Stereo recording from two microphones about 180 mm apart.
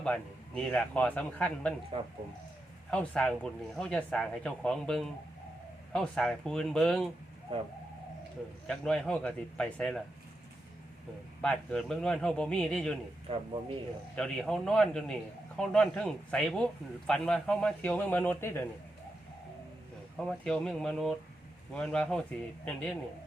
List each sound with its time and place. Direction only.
0.0 s speech: 5° left (ahead or behind)
2.9 s a man's voice: 5° left (ahead or behind)
7.5 s speech: 30° right (ahead or behind)
8.6 s a man's voice: 5° left (ahead or behind)
11.4 s a man's voice: 5° left (ahead or behind)
13.3 s speech: 35° right (ahead or behind)
14.2 s a man's voice: 5° left (ahead or behind)
20.1 s a man's voice: 5° left (ahead or behind)